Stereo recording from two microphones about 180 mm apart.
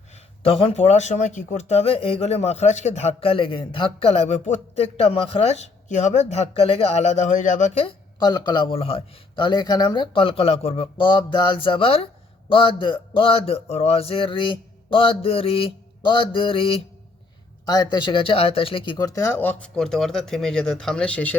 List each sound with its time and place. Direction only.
0.4 s a man's voice: 30° left (ahead or behind); by 21.3 s 5° left (ahead or behind)